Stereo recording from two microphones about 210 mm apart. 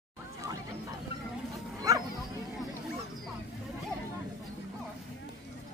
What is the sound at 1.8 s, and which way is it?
Bow-wow, 15° right (ahead or behind).